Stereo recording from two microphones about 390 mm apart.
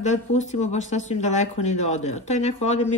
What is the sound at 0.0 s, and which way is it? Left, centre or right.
Speech, centre.